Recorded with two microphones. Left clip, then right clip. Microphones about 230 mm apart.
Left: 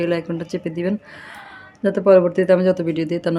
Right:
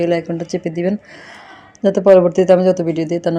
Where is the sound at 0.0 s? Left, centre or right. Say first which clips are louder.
Right 4 dB; centre.